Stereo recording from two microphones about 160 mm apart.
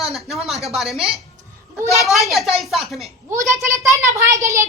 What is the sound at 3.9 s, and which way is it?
Speech, 20° right (ahead or behind).